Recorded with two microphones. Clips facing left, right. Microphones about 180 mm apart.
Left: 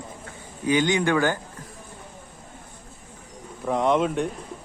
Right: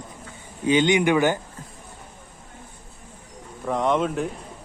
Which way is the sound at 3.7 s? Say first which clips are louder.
Left 1 dB; centre (ahead or behind).